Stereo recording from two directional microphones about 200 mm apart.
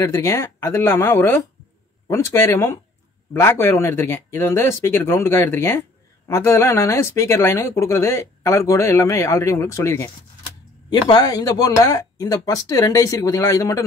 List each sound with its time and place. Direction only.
0.0 s speech: 15° left (ahead or behind)